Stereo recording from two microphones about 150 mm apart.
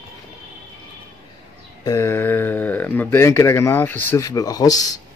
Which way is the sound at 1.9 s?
15° left (ahead or behind).